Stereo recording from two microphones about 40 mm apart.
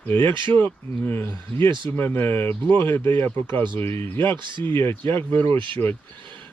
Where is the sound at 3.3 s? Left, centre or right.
Left.